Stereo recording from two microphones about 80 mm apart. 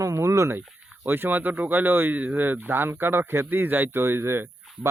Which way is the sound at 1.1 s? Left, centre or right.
Right.